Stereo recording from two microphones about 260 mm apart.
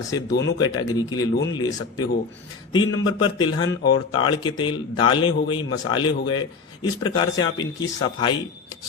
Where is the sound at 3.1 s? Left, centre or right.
Centre.